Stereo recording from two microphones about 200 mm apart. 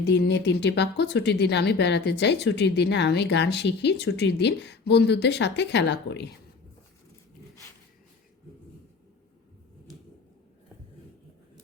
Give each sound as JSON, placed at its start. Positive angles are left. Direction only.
{"t": 0.0, "sound": "speech", "side_deg": 60}